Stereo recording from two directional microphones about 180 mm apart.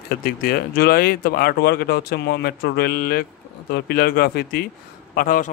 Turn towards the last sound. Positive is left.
turn(degrees=50)  # may be behind; listen again after turning